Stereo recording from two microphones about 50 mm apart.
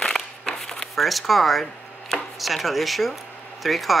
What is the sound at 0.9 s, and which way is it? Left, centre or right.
Speech, centre.